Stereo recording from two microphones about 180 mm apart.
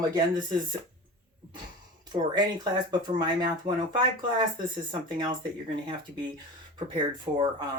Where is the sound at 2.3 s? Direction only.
25° right (ahead or behind).